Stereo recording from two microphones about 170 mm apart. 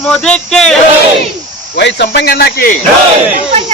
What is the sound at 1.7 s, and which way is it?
Speech, 80° left.